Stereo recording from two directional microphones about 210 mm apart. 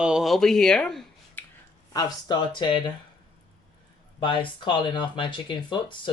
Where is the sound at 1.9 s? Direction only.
20° left (ahead or behind).